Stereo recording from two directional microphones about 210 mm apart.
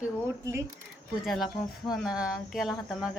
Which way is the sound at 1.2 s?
Centre (ahead or behind).